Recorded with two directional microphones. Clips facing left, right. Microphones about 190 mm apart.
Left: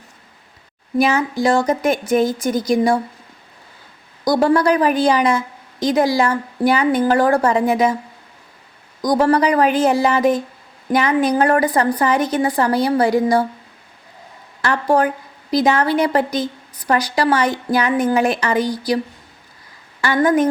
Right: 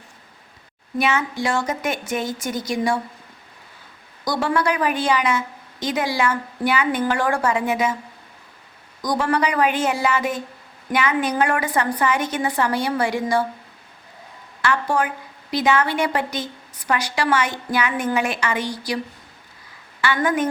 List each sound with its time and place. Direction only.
0.9 s a woman's voice: 35° left (ahead or behind)
4.3 s a woman's voice: 40° left (ahead or behind)
9.0 s a woman's voice: 35° left (ahead or behind)
14.6 s a woman's voice: 40° left (ahead or behind)
20.0 s a woman's voice: 40° left (ahead or behind)